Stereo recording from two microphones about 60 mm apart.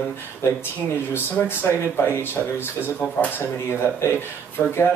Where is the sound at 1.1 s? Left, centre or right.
Left.